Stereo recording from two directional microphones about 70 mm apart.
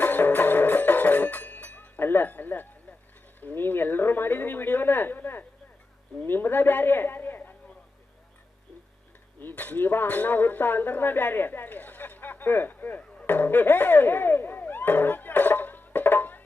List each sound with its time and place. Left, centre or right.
0.0 s music: left
3.4 s speech: left
9.4 s speech: left
13.0 s a sound: centre